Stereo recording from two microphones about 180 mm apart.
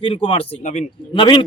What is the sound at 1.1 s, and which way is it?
Speech, 25° left (ahead or behind).